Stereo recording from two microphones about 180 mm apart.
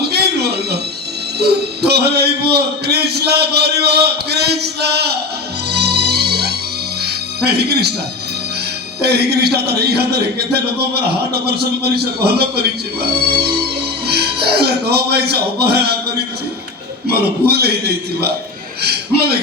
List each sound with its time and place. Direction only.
0.0 s a sound: 65° right (ahead or behind)
1.4 s a man's voice: 65° right (ahead or behind)
5.7 s music: 65° right (ahead or behind)
9.0 s a man's voice: 65° right (ahead or behind)
14.1 s speech: 60° right (ahead or behind)
17.1 s a man's voice: 60° right (ahead or behind)